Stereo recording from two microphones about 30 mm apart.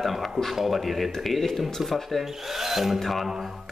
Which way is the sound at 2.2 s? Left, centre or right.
Centre.